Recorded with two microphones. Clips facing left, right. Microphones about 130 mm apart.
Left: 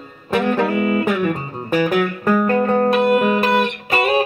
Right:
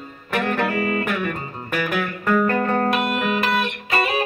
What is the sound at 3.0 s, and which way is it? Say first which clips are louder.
Music: left 7 dB; 30° left (ahead or behind).